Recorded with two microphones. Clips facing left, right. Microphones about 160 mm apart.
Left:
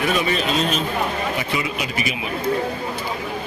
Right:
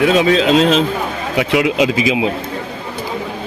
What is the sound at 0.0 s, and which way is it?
A man's voice, 90° right.